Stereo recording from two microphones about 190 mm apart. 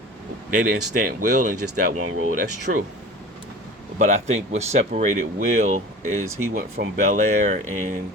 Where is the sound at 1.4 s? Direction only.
45° right (ahead or behind).